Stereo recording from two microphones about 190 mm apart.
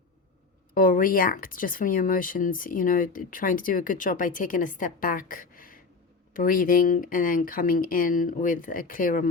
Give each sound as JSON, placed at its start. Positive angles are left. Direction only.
{"t": 0.7, "sound": "speech", "side_deg": 50}